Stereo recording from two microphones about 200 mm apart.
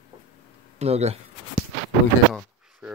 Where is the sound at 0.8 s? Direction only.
30° right (ahead or behind).